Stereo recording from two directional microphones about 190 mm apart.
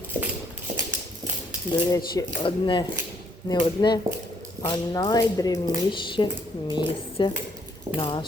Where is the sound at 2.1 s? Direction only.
25° left (ahead or behind).